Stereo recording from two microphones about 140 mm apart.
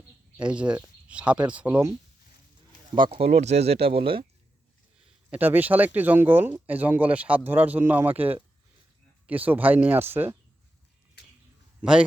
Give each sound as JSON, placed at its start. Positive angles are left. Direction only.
{"t": 0.3, "sound": "speech", "side_deg": -10}
{"t": 2.9, "sound": "speech", "side_deg": -40}
{"t": 5.3, "sound": "speech", "side_deg": -15}
{"t": 11.8, "sound": "a man's voice", "side_deg": -5}